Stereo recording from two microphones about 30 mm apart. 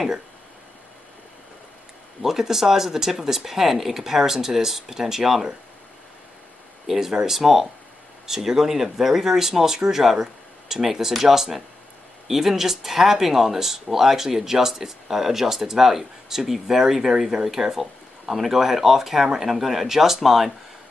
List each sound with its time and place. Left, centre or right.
2.2 s speech: centre
6.9 s speech: centre